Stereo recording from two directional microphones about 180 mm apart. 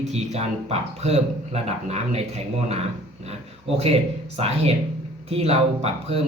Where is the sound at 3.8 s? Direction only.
35° right (ahead or behind).